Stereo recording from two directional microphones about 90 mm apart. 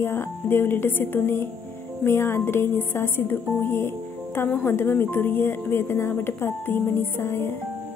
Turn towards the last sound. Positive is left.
turn(degrees=30)  # may be behind; listen again after turning